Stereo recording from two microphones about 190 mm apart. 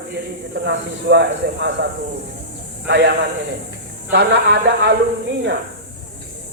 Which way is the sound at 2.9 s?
65° right (ahead or behind).